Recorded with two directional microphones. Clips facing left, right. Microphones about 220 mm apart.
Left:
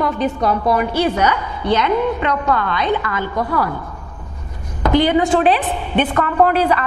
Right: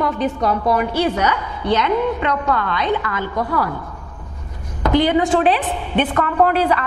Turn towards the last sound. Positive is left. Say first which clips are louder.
# left 1 dB
turn(degrees=15)  # may be behind; listen again after turning